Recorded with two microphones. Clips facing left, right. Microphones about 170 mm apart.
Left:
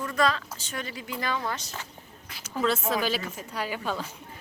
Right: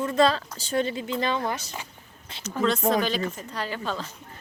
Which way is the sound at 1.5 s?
10° right (ahead or behind).